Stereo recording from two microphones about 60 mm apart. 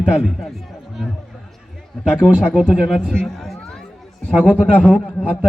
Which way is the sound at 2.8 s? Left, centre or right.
Centre.